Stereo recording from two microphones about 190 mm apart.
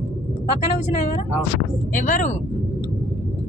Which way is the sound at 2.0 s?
45° left (ahead or behind).